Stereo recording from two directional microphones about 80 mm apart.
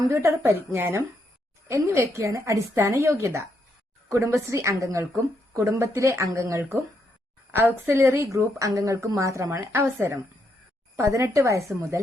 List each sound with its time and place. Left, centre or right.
0.1 s a woman's voice: right
2.0 s speech: right